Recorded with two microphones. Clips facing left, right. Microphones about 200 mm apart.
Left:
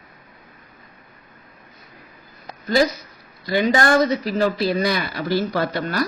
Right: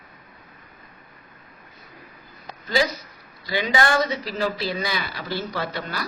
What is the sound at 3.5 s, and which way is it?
Speech, 45° left (ahead or behind).